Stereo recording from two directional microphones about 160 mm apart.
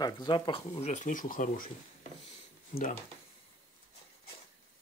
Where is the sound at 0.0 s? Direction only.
30° left (ahead or behind); by 1.7 s 60° left (ahead or behind).